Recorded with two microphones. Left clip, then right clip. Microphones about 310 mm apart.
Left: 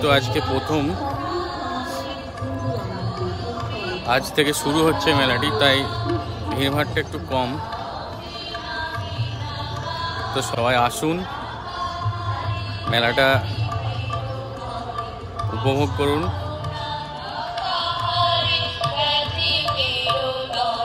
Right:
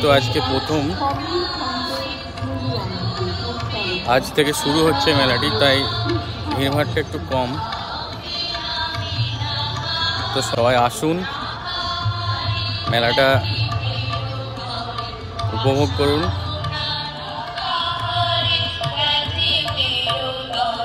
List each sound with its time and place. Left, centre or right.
0.0 s speech: centre
4.1 s speech: centre
10.3 s speech: centre
12.9 s speech: centre
15.6 s speech: centre
17.8 s music: left
20.5 s music: centre